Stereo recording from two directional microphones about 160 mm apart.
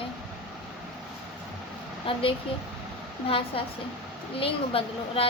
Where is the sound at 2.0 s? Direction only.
35° left (ahead or behind).